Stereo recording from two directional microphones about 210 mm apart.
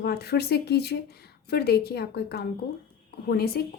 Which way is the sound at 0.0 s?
50° left (ahead or behind).